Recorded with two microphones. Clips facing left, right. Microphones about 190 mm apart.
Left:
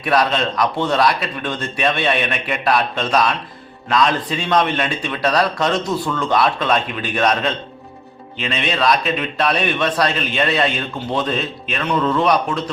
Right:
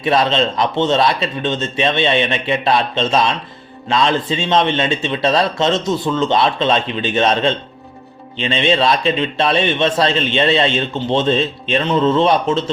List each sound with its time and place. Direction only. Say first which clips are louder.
0.0 s a man's voice: right 2 dB; 25° right (ahead or behind)